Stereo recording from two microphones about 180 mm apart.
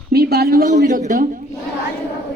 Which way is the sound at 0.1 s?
65° right (ahead or behind).